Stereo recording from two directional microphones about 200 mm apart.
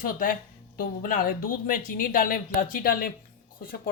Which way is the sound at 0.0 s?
45° left (ahead or behind).